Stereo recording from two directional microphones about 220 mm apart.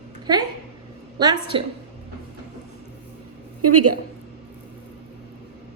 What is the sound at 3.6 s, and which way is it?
Speech, 90° right.